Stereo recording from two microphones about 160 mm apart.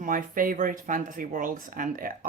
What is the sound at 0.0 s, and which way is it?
Speech, 60° right (ahead or behind).